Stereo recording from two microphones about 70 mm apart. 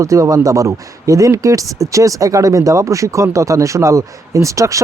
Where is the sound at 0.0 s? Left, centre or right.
Right.